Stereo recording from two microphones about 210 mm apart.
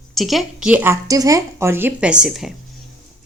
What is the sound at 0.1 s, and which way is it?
A woman's voice, centre (ahead or behind).